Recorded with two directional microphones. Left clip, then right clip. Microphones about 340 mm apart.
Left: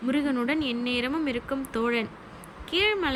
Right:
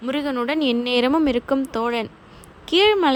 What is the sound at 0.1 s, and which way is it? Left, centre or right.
A woman's voice, centre.